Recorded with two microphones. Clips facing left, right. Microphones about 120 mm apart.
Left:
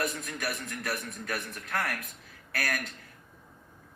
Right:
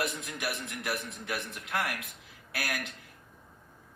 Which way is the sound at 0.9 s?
15° right (ahead or behind).